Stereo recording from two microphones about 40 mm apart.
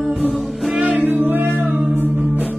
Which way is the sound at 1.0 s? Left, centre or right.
Right.